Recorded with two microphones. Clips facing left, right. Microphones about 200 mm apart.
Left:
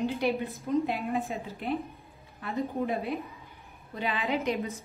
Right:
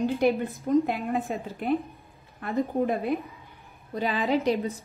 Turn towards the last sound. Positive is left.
turn(degrees=-35)  # may be behind; listen again after turning